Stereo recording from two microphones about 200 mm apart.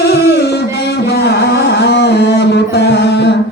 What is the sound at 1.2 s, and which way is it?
Music, 55° left (ahead or behind).